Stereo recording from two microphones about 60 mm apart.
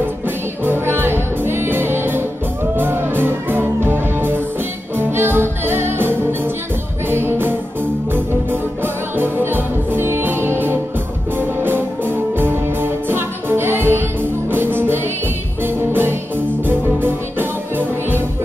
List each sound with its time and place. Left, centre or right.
0.7 s music: right